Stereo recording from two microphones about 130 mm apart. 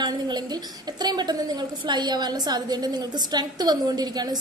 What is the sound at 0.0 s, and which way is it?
A woman's voice, 30° right (ahead or behind).